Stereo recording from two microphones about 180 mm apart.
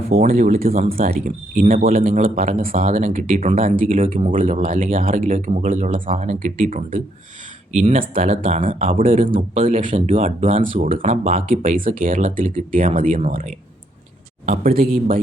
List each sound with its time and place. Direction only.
0.3 s speech: 45° right (ahead or behind)
1.1 s speech: 45° right (ahead or behind)
10.2 s speech: 35° right (ahead or behind)
14.5 s speech: 55° right (ahead or behind)